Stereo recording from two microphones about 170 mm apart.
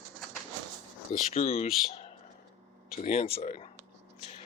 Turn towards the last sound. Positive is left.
turn(degrees=40)  # may be behind; listen again after turning